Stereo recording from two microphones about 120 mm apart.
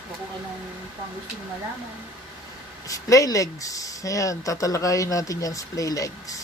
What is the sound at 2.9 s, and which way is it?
Speech, 30° left (ahead or behind).